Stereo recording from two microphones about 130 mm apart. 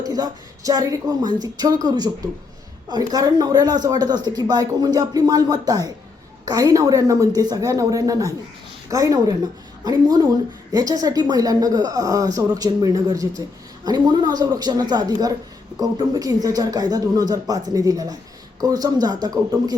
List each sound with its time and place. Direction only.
0.0 s a woman's voice: 30° right (ahead or behind)